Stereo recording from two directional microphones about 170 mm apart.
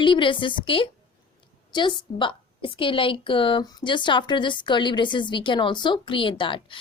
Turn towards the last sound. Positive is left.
turn(degrees=30)  # may be behind; listen again after turning